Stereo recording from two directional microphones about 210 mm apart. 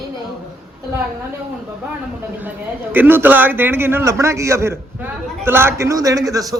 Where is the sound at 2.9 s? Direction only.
10° right (ahead or behind).